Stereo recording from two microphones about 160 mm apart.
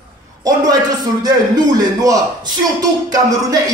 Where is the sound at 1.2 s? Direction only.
25° right (ahead or behind).